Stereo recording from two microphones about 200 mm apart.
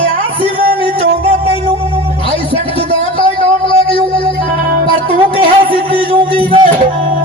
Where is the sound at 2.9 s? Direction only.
25° left (ahead or behind).